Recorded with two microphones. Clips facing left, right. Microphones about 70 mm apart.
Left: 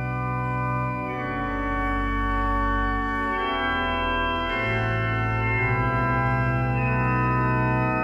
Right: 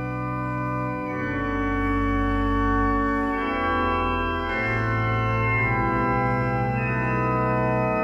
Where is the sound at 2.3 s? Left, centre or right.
Left.